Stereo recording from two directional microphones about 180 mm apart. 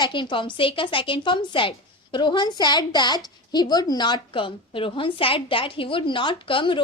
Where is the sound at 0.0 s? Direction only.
25° left (ahead or behind).